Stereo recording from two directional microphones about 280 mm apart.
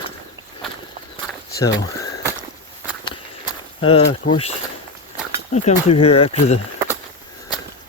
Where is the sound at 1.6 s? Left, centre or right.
Centre.